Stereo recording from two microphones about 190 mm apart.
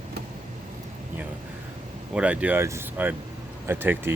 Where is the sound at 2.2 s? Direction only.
5° right (ahead or behind).